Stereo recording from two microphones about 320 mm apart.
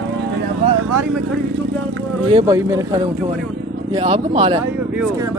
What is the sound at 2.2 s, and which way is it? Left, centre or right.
Speech, centre.